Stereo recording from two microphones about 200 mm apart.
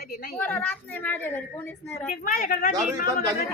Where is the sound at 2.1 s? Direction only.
45° left (ahead or behind).